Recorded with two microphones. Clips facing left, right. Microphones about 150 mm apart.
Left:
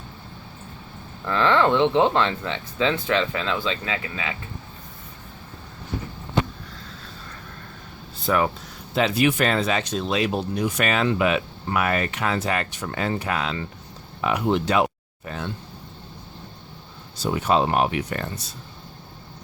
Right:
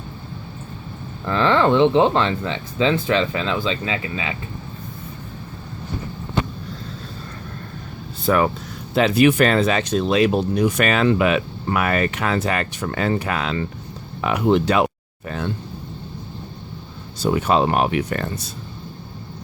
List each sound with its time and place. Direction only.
1.2 s speech: 25° right (ahead or behind)
1.7 s speech: 15° right (ahead or behind)
8.3 s speech: 60° right (ahead or behind)
17.2 s speech: 65° right (ahead or behind)